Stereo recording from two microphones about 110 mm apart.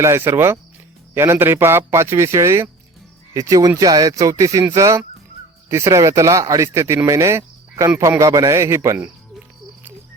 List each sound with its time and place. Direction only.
0.0 s speech: 25° right (ahead or behind)